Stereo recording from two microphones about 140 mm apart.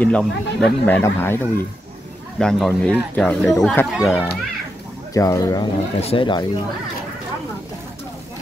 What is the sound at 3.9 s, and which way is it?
Speech, 5° right (ahead or behind).